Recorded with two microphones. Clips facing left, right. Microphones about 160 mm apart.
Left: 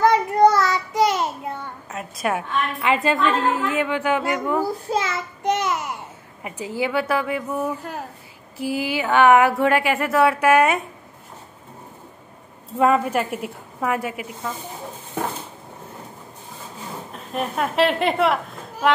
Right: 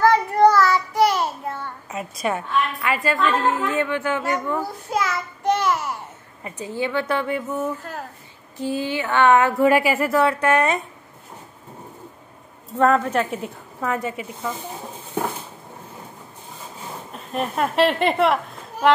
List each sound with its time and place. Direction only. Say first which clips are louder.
0.0 s child singing: even; 20° left (ahead or behind)
1.9 s a woman's voice: even; centre (ahead or behind)
2.8 s a woman's voice: left 6 dB; 20° left (ahead or behind)
4.9 s a child's voice: even; 25° left (ahead or behind)
9.6 s a woman's voice: right 2 dB; 5° right (ahead or behind)
12.7 s a woman's voice: even; 10° left (ahead or behind)
17.1 s a woman's voice: right 1 dB; centre (ahead or behind)